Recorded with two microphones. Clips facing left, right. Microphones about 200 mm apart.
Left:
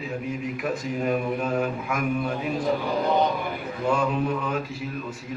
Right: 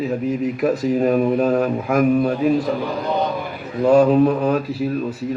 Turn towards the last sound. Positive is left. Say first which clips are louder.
# right 10 dB
turn(degrees=-40)  # may be behind; listen again after turning